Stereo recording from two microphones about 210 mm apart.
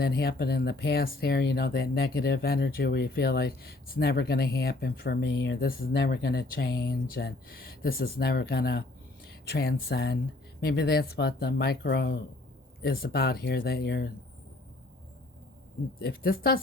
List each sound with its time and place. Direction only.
0.0 s speech: 50° left (ahead or behind)
16.0 s speech: 45° left (ahead or behind)